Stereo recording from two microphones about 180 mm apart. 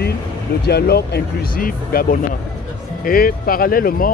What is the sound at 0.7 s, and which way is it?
Speech, 65° left (ahead or behind).